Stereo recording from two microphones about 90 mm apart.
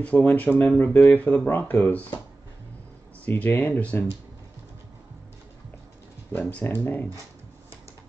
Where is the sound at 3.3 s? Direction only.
20° left (ahead or behind).